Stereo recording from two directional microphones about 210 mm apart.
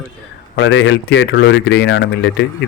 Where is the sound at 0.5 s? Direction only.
60° left (ahead or behind).